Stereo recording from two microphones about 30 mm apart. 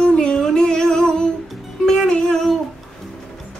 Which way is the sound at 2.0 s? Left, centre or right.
Left.